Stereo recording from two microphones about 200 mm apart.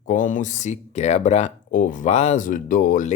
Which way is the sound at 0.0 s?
40° left (ahead or behind).